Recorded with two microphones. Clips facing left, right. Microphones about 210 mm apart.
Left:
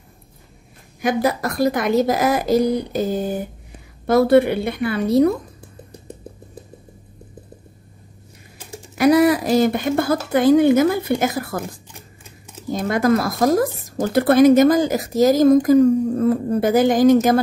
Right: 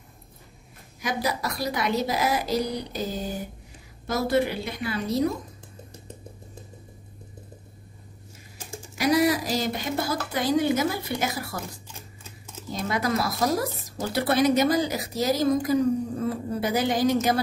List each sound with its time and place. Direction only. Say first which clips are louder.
1.0 s a woman's voice: left 9 dB; 50° left (ahead or behind)
8.9 s speech: left 8 dB; 55° left (ahead or behind)
12.7 s speech: left 9 dB; 50° left (ahead or behind)